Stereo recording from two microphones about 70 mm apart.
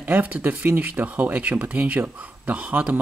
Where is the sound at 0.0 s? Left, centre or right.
Right.